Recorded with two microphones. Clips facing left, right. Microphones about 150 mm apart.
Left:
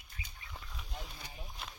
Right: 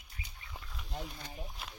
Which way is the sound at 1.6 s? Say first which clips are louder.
Even; 5° right (ahead or behind).